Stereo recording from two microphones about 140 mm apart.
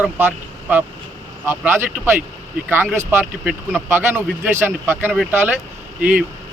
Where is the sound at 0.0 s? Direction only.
15° right (ahead or behind).